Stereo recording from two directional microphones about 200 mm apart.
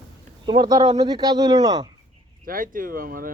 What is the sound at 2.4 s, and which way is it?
Speech, 45° right (ahead or behind).